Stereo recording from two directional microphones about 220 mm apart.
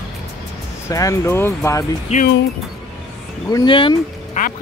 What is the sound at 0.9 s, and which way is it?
Speech, 15° left (ahead or behind).